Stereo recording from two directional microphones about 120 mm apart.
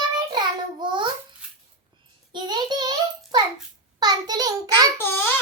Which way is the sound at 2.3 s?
35° right (ahead or behind).